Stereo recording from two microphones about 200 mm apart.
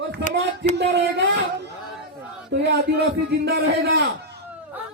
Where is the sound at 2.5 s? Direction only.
55° right (ahead or behind).